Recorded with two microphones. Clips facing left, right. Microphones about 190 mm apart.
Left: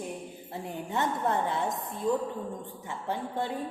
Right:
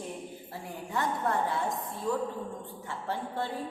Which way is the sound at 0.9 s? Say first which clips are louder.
Left 1 dB; 20° left (ahead or behind).